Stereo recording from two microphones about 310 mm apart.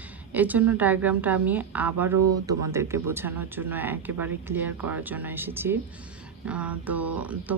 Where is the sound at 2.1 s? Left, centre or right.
Right.